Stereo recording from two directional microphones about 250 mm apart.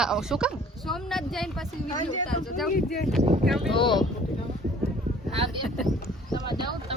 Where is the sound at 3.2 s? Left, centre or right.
Right.